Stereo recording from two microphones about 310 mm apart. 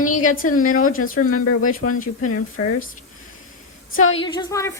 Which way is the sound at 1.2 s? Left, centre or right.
Left.